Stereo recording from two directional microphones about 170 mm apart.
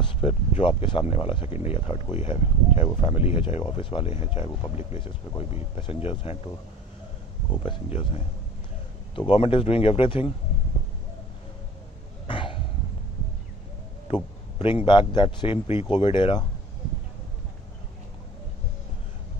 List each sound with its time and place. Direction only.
0.0 s speech: 30° left (ahead or behind)
7.6 s speech: 30° left (ahead or behind)
12.3 s cough: 30° left (ahead or behind)
14.0 s a sound: 30° left (ahead or behind)
14.9 s speech: 30° left (ahead or behind)